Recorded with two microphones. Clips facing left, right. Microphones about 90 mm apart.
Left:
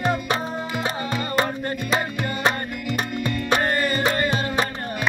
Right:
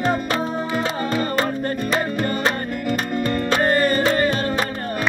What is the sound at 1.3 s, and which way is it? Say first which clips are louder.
Music: right 2 dB; 15° left (ahead or behind).